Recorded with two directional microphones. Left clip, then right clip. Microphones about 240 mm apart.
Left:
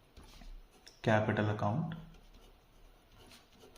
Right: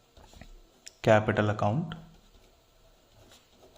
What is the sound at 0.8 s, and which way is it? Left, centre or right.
Speech, right.